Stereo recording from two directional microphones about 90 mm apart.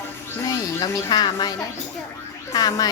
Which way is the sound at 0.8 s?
50° left (ahead or behind).